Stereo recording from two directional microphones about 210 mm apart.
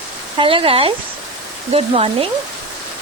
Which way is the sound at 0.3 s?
25° right (ahead or behind).